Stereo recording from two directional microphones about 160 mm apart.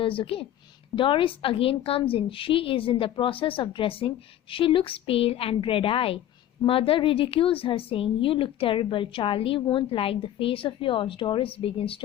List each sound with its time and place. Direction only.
0.0 s a woman's voice: 35° left (ahead or behind)